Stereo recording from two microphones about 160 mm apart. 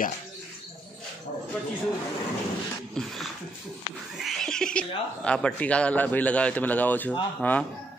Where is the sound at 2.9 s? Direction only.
Centre (ahead or behind).